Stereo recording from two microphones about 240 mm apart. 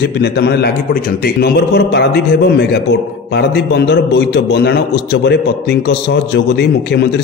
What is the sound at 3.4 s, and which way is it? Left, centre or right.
A man's voice, left.